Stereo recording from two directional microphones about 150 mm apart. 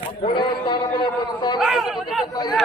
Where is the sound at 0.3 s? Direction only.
30° left (ahead or behind).